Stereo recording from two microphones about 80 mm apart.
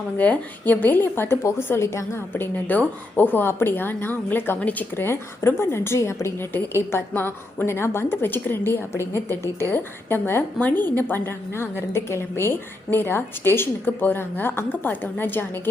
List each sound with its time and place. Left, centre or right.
0.2 s a woman's voice: left
7.1 s a woman's voice: left